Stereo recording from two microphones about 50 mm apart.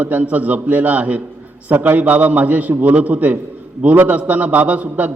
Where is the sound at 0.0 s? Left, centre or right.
Right.